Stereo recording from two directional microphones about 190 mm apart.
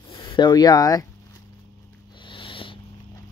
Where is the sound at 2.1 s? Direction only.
25° left (ahead or behind).